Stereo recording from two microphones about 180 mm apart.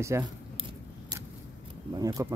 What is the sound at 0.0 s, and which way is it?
Speech, 15° right (ahead or behind).